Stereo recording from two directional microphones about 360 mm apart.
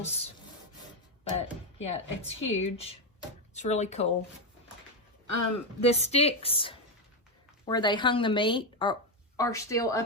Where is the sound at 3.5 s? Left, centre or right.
Centre.